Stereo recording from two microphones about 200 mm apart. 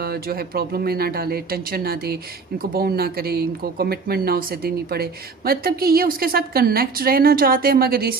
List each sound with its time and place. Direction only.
0.0 s a woman's voice: 50° right (ahead or behind)